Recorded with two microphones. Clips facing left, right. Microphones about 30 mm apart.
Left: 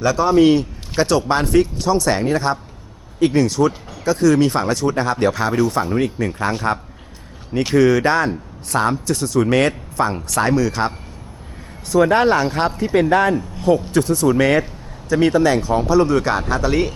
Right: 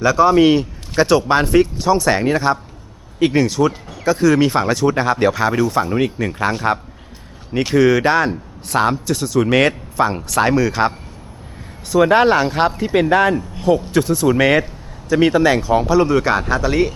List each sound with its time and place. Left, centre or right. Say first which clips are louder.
0.0 s speech: right 2 dB; centre
9.0 s speech: right 1 dB; centre
11.9 s speech: right 2 dB; centre